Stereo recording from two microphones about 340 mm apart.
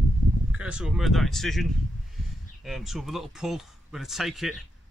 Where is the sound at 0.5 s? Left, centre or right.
Centre.